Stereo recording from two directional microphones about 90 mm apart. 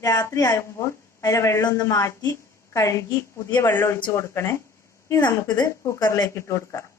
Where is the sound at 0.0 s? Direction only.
40° left (ahead or behind).